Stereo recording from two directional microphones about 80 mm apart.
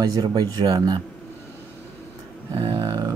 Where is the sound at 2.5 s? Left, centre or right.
Right.